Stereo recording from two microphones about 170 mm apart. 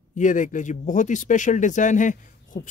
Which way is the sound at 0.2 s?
50° left (ahead or behind).